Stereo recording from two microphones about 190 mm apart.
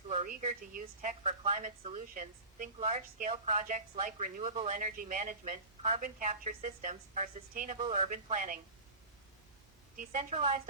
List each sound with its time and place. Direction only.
0.1 s a woman's voice: 35° right (ahead or behind)
7.9 s a woman's voice: 35° right (ahead or behind)
10.0 s a woman's voice: 40° right (ahead or behind)